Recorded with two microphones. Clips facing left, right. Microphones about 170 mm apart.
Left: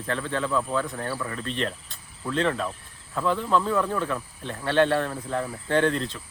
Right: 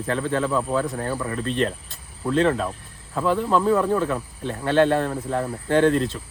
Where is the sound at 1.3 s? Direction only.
40° right (ahead or behind).